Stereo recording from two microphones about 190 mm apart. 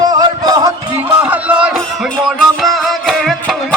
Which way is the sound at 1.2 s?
5° right (ahead or behind).